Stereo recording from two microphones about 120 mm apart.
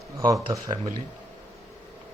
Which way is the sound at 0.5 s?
40° right (ahead or behind).